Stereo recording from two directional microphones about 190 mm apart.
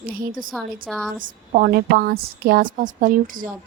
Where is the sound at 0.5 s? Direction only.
Centre (ahead or behind).